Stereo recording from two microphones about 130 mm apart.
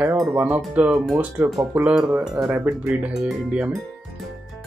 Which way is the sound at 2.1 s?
20° right (ahead or behind).